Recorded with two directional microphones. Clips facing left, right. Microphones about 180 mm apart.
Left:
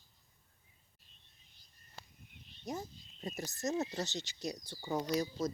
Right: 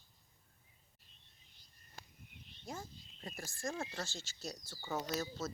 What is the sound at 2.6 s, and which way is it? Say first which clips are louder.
Speech: left 6 dB; 20° left (ahead or behind).